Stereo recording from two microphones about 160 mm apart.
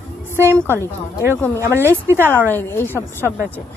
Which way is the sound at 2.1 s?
15° right (ahead or behind).